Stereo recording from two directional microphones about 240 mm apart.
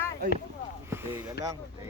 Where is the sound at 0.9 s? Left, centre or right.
Centre.